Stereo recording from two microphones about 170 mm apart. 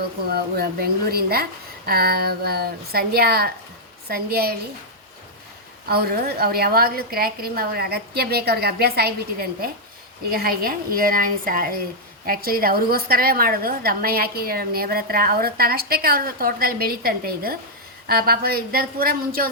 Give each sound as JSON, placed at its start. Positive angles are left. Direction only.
{"t": 0.3, "sound": "a woman's voice", "side_deg": -65}
{"t": 5.9, "sound": "a woman's voice", "side_deg": -65}